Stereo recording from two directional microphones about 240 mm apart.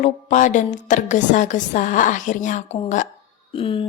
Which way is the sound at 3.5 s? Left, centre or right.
Left.